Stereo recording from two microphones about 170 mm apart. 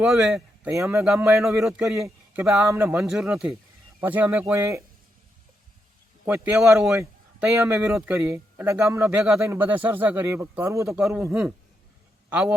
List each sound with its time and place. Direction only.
0.0 s a man's voice: 5° right (ahead or behind)
0.7 s a man's voice: 15° right (ahead or behind)
1.3 s a man's voice: centre (ahead or behind)
2.0 s a man's voice: 15° right (ahead or behind)
3.0 s a man's voice: 5° right (ahead or behind)
6.2 s a man's voice: 10° right (ahead or behind)
10.8 s a man's voice: 5° right (ahead or behind)